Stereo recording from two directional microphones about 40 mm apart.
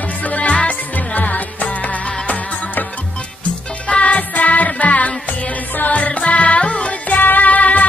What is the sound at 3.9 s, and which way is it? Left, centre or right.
Music, left.